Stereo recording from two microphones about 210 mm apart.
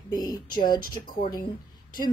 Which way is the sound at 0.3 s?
40° left (ahead or behind).